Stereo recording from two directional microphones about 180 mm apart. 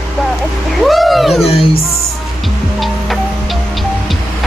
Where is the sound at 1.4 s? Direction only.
35° left (ahead or behind).